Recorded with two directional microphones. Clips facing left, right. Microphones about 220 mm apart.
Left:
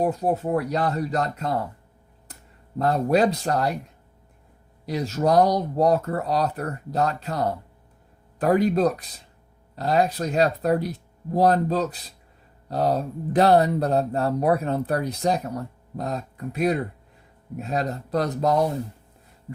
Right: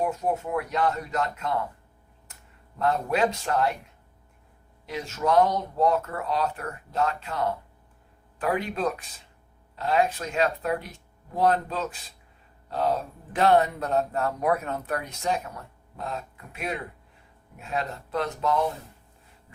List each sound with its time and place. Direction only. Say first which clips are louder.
0.0 s speech: left 4 dB; 35° left (ahead or behind)
2.7 s speech: left 5 dB; 35° left (ahead or behind)
4.9 s speech: left 4 dB; 35° left (ahead or behind)